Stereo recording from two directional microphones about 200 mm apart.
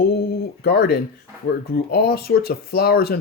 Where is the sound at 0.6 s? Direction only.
55° left (ahead or behind).